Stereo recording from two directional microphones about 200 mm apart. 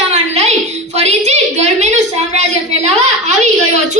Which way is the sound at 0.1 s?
35° right (ahead or behind).